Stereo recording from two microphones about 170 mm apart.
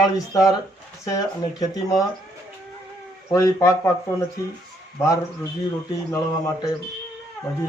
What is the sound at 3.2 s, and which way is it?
Speech, 20° left (ahead or behind).